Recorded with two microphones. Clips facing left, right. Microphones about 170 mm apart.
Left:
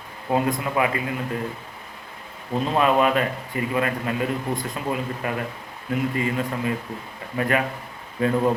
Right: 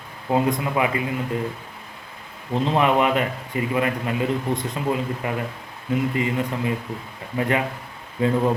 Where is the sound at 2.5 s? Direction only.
20° right (ahead or behind).